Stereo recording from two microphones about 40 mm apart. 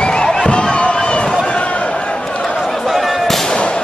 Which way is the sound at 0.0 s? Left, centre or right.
Left.